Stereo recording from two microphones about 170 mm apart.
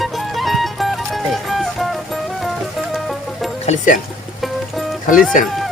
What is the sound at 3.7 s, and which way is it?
Speech, 50° left (ahead or behind).